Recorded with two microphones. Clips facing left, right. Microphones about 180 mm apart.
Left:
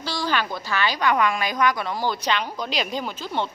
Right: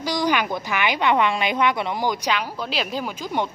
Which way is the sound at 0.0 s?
15° right (ahead or behind).